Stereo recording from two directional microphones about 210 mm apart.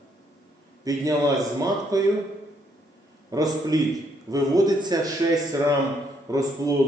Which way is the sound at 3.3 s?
15° right (ahead or behind).